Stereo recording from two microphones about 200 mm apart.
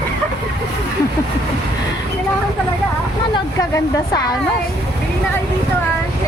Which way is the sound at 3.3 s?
15° left (ahead or behind).